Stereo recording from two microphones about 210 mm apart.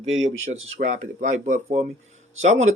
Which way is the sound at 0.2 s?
35° right (ahead or behind).